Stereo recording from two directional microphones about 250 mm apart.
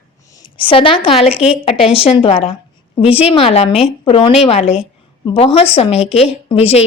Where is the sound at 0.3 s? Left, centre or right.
Centre.